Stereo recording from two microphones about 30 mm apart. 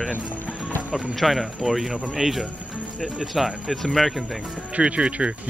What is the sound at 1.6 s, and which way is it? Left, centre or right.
Speech, centre.